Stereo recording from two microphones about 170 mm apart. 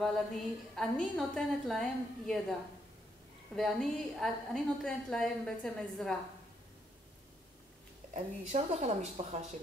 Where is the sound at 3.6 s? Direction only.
Centre (ahead or behind).